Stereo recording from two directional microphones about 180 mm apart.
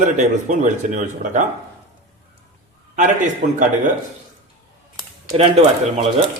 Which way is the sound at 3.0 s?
45° right (ahead or behind).